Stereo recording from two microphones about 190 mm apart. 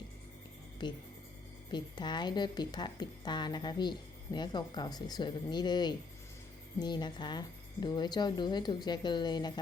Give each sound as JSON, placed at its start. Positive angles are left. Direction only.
{"t": 0.8, "sound": "a woman's voice", "side_deg": 25}